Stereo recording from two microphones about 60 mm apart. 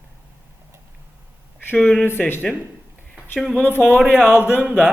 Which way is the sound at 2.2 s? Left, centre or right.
Centre.